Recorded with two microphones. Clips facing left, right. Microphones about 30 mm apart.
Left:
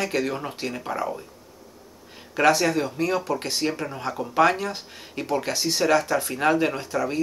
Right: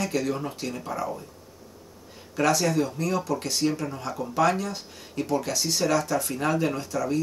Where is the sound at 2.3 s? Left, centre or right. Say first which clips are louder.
Left 3 dB; left.